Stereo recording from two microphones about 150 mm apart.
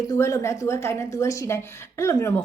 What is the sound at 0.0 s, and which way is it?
A woman's voice, 20° left (ahead or behind).